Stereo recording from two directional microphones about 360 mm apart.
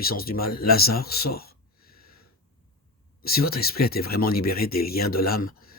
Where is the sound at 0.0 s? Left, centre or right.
Left.